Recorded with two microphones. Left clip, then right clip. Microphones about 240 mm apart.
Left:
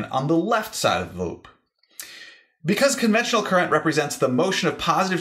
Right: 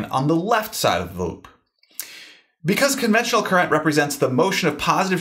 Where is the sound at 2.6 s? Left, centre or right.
Right.